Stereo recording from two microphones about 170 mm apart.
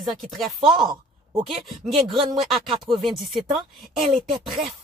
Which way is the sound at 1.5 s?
Centre (ahead or behind).